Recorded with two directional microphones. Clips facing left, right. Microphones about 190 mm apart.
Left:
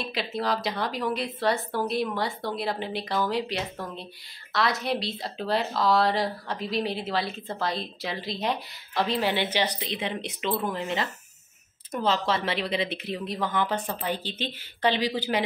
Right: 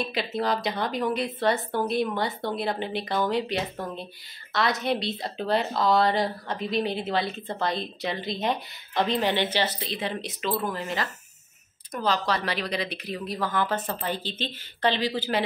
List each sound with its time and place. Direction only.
0.0 s a woman's voice: centre (ahead or behind)